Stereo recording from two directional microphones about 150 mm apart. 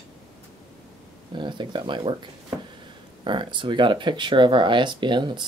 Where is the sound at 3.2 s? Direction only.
35° right (ahead or behind).